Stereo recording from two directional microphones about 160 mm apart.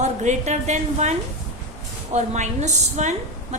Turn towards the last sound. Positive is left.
turn(degrees=-45)  # may be behind; listen again after turning